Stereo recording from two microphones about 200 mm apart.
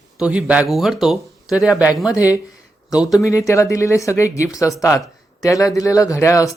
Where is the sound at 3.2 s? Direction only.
15° left (ahead or behind).